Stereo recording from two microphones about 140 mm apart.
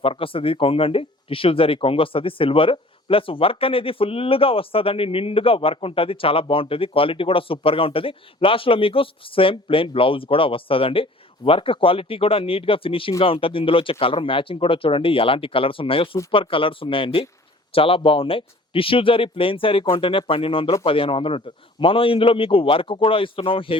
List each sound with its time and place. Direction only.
0.0 s speech: 40° left (ahead or behind)